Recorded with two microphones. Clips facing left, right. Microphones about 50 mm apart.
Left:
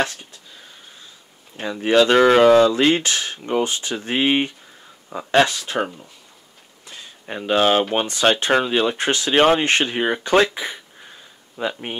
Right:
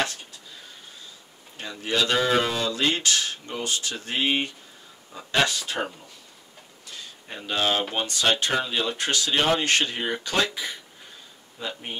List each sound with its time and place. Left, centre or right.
1.6 s speech: left
2.1 s speech: left
2.6 s speech: left
5.1 s speech: left
7.2 s speech: left